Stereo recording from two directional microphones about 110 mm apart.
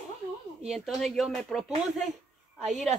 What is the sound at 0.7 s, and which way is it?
Speech, centre (ahead or behind).